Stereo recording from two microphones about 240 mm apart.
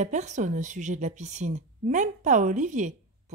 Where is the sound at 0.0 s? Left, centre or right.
Right.